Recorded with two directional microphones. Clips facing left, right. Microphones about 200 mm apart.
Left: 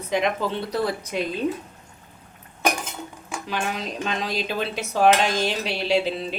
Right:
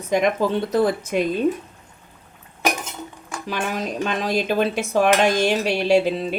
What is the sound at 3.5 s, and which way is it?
Speech, 50° right (ahead or behind).